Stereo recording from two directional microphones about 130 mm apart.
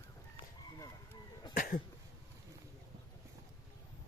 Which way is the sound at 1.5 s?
90° left.